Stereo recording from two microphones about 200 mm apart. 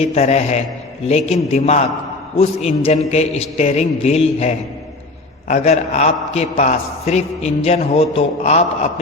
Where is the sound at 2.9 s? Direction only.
35° left (ahead or behind).